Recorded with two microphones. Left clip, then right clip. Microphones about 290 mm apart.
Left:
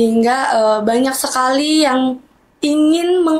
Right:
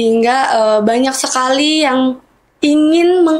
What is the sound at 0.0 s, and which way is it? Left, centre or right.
A woman's voice, right.